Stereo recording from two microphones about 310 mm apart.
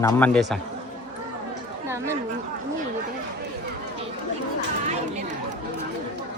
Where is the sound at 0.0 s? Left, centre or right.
Centre.